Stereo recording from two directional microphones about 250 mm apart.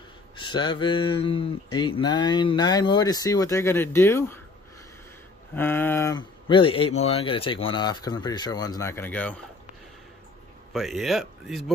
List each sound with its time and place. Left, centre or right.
0.4 s speech: centre
5.5 s speech: centre
10.7 s speech: centre